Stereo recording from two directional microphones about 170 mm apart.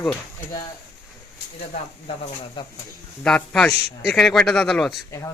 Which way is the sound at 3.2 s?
5° left (ahead or behind).